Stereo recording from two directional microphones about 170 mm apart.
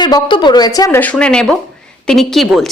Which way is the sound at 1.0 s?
5° left (ahead or behind).